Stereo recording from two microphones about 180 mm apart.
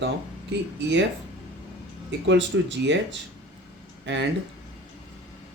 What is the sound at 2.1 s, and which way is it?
Speech, 80° right.